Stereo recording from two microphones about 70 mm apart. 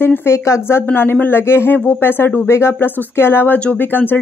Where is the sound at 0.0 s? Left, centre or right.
Left.